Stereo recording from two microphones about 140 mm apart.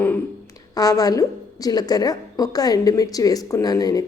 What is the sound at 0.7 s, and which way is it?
A woman's voice, 25° left (ahead or behind).